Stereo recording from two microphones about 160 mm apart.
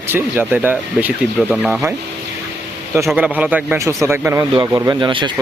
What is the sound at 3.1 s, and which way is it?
Speech, 5° right (ahead or behind).